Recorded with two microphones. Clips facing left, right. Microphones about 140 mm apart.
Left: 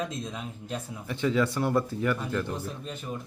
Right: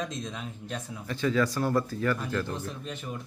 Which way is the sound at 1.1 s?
20° left (ahead or behind).